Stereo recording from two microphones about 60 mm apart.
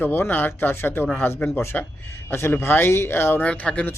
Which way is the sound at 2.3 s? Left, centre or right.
Left.